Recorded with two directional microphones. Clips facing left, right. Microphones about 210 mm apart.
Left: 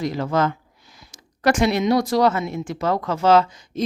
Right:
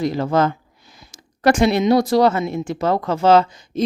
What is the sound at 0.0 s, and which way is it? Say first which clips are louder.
Speech: right 3 dB; 30° right (ahead or behind).